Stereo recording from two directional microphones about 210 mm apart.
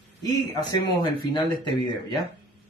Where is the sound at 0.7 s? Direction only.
20° left (ahead or behind).